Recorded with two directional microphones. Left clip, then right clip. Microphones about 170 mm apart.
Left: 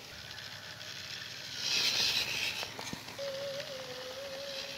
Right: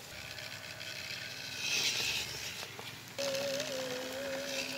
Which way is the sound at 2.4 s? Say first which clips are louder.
Left 5 dB; 50° left (ahead or behind).